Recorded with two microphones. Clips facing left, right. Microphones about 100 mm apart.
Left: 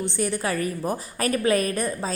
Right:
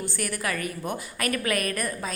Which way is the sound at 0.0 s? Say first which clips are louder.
Left 5 dB; 20° left (ahead or behind).